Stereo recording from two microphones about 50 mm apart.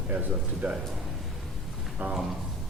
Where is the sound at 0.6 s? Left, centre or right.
Centre.